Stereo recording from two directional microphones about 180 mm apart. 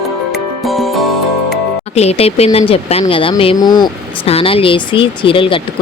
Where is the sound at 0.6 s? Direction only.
Centre (ahead or behind).